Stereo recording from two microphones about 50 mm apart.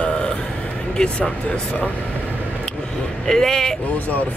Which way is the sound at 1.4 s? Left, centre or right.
Left.